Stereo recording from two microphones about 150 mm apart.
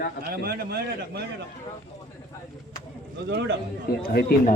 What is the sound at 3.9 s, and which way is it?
Speech, 90° left.